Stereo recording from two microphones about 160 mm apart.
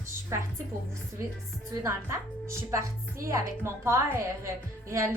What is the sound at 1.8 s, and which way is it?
A woman's voice, 15° right (ahead or behind).